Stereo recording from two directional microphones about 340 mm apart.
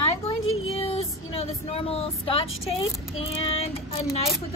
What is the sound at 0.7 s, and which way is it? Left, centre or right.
Speech, centre.